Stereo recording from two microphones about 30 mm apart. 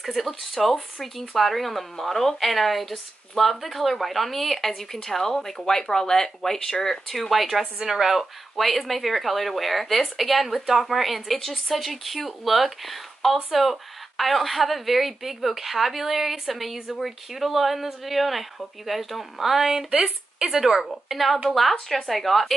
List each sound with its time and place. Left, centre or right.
0.0 s speech: centre
7.4 s a woman's voice: centre
8.2 s speech: centre